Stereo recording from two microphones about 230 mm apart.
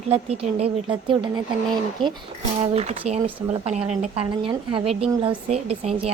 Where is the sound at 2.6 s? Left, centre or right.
Right.